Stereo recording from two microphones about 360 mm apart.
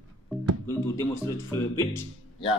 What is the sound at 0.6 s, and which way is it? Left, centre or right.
Speech, centre.